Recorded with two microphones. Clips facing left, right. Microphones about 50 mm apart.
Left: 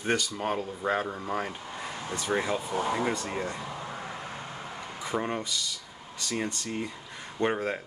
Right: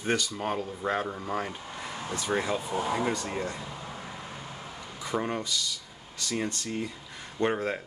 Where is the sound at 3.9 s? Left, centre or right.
Left.